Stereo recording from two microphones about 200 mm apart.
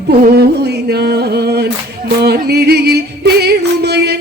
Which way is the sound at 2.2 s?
55° right (ahead or behind).